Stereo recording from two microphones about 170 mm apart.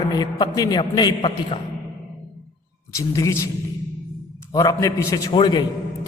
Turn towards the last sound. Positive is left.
turn(degrees=30)  # may be behind; listen again after turning